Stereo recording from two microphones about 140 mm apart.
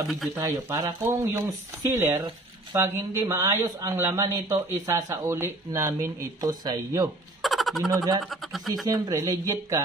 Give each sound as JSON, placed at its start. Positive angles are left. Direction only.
{"t": 0.4, "sound": "speech", "side_deg": -25}
{"t": 7.4, "sound": "a sound", "side_deg": 0}
{"t": 7.9, "sound": "speech", "side_deg": -25}
{"t": 8.5, "sound": "speech", "side_deg": 0}
{"t": 8.8, "sound": "speech", "side_deg": -25}